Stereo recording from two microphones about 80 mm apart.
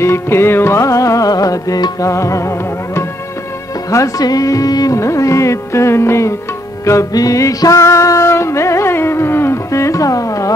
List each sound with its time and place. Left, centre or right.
0.0 s music: left
3.9 s music: left